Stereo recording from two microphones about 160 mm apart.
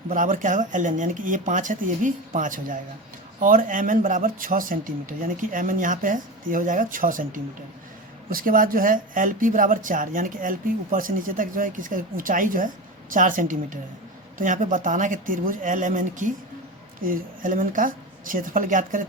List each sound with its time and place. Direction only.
0.1 s speech: 55° right (ahead or behind)